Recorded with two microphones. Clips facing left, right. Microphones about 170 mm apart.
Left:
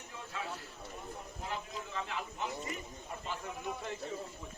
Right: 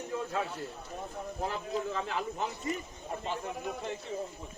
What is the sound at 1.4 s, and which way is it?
Speech, 40° right (ahead or behind).